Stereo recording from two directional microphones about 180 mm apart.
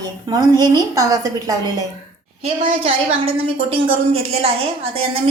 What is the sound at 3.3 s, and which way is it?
A woman's voice, 30° right (ahead or behind).